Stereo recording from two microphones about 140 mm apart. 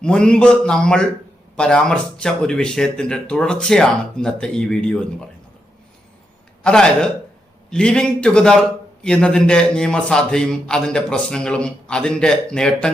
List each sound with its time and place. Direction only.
0.0 s a man's voice: 5° left (ahead or behind)
6.6 s a man's voice: 5° left (ahead or behind)